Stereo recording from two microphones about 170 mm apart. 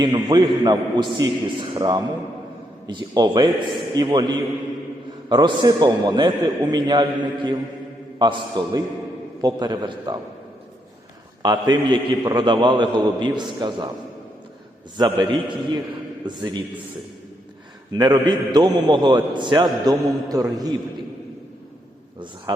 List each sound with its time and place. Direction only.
0.0 s a man's voice: 25° right (ahead or behind)
8.2 s a man's voice: 25° right (ahead or behind)
11.4 s a man's voice: 20° right (ahead or behind)
14.9 s a man's voice: 20° right (ahead or behind)
17.9 s a man's voice: 25° right (ahead or behind)
22.5 s a man's voice: 25° right (ahead or behind)